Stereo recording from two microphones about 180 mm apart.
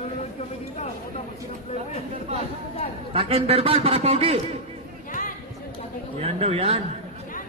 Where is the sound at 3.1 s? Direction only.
35° right (ahead or behind).